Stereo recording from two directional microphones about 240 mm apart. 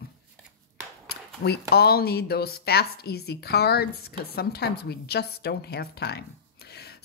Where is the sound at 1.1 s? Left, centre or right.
Left.